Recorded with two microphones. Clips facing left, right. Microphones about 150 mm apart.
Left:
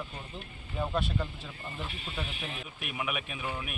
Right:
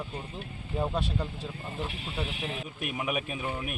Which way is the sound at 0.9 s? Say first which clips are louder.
Right 1 dB; 35° right (ahead or behind).